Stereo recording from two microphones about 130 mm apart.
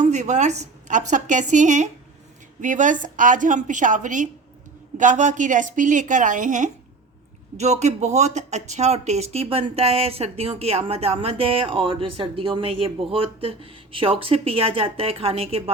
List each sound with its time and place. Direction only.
0.0 s a woman's voice: 65° right (ahead or behind)
7.5 s speech: 60° right (ahead or behind)